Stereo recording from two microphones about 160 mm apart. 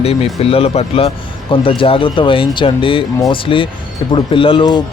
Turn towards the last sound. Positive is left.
turn(degrees=30)  # may be behind; listen again after turning